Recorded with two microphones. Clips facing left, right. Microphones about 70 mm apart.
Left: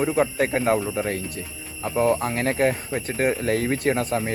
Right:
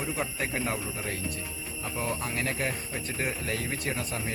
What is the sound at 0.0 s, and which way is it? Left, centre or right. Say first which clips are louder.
A man's voice: left 11 dB; left.